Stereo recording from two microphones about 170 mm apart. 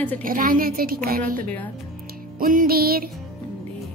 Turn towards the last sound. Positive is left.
turn(degrees=-60)  # may be behind; listen again after turning